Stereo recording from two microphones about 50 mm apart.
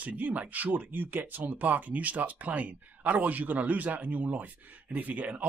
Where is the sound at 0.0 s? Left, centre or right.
Right.